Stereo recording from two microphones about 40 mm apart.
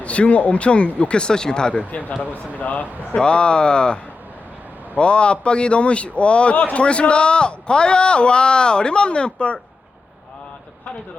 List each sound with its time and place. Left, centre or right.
0.0 s a man's voice: left
2.6 s speech: left
3.2 s a man's voice: left